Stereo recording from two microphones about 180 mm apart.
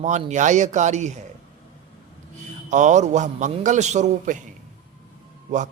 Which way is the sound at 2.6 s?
40° right (ahead or behind).